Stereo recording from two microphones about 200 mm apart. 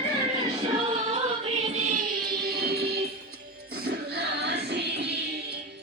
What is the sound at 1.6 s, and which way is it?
Music, 35° right (ahead or behind).